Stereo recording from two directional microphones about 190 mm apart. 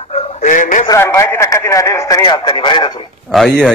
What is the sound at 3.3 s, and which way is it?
Speech, centre (ahead or behind).